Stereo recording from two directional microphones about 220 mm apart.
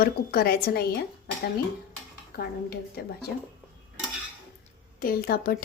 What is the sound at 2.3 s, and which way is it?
Speech, 45° left (ahead or behind).